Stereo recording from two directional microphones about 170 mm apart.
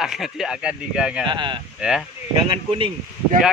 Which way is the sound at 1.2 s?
30° right (ahead or behind).